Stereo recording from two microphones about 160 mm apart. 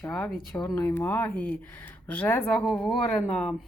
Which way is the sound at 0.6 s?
20° left (ahead or behind).